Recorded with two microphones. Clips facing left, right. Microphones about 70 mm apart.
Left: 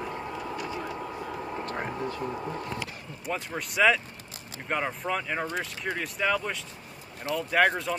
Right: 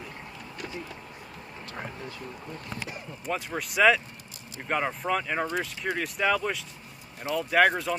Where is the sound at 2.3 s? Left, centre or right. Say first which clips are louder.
Left 7 dB; left.